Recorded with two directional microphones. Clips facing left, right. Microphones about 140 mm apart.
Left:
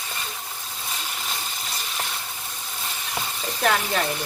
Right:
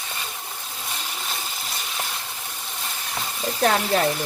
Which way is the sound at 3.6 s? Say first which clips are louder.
Right 3 dB; 35° right (ahead or behind).